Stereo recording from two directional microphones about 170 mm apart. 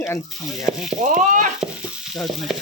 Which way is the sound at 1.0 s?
50° right (ahead or behind).